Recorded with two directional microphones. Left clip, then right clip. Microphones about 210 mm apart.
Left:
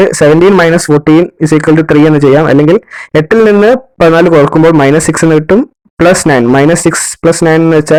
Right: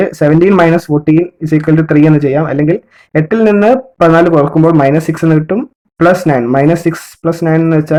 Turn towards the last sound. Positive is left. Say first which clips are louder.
# left 5 dB
turn(degrees=30)  # may be behind; listen again after turning